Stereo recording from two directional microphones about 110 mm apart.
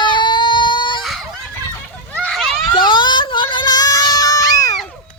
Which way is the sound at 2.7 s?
45° left (ahead or behind).